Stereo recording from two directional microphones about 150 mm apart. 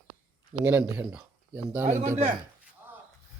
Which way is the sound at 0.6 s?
15° right (ahead or behind).